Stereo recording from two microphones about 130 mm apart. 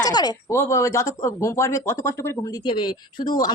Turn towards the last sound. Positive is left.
turn(degrees=35)  # may be behind; listen again after turning